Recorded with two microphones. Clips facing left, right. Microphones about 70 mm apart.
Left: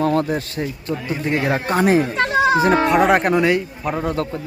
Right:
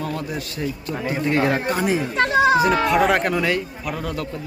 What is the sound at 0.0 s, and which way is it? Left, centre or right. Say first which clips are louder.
Speech: left 8 dB; left.